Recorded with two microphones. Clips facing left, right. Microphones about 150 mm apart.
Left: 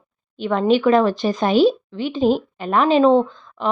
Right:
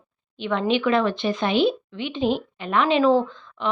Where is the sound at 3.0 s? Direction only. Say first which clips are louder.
Left 4 dB; 25° left (ahead or behind).